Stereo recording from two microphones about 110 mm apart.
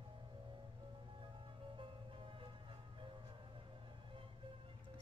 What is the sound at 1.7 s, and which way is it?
Music, 50° right (ahead or behind).